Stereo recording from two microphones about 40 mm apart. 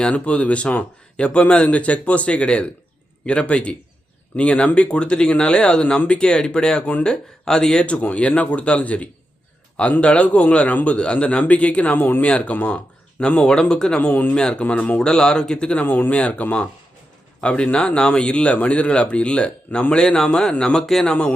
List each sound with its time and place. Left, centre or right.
0.1 s speech: left
13.5 s speech: centre
14.0 s speech: left
14.3 s speech: centre
14.6 s speech: left
15.0 s speech: centre
15.8 s speech: left; by 21.1 s centre
21.1 s speech: left